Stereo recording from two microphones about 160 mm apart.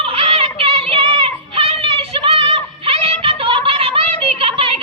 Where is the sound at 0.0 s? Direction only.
35° right (ahead or behind).